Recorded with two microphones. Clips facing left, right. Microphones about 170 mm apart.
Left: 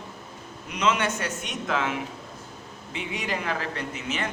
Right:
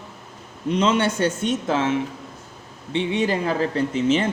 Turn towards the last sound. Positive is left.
turn(degrees=-30)  # may be behind; listen again after turning